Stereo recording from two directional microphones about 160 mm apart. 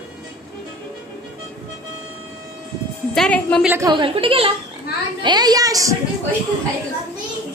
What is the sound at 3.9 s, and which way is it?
A woman's voice, 30° right (ahead or behind).